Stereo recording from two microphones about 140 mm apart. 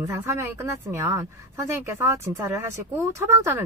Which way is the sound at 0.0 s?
20° right (ahead or behind).